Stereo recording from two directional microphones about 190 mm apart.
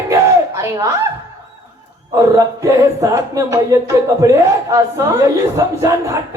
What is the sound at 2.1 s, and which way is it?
Speech, 15° right (ahead or behind).